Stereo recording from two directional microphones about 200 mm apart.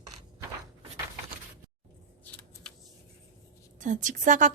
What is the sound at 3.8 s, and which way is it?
Speech, 40° right (ahead or behind).